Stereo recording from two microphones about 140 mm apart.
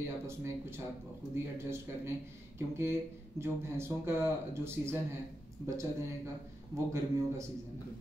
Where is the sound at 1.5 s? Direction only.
15° right (ahead or behind).